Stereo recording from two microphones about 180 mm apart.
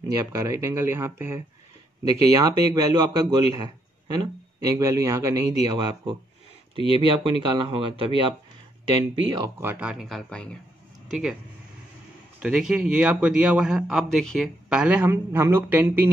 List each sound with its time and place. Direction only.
0.1 s a man's voice: 20° right (ahead or behind)
9.6 s a man's voice: 10° right (ahead or behind)
12.4 s a man's voice: 5° right (ahead or behind)